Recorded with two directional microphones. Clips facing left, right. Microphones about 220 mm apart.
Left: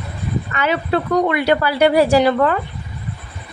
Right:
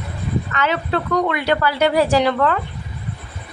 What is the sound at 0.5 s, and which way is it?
A woman's voice, 10° left (ahead or behind).